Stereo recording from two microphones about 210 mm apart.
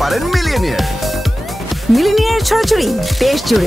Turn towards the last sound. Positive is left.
turn(degrees=0)  # may be behind; listen again after turning